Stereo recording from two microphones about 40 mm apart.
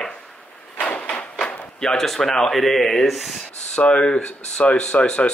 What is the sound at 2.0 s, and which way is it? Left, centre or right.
Speech, centre.